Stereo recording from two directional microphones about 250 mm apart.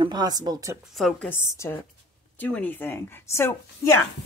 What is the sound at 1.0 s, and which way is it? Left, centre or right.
A woman's voice, centre.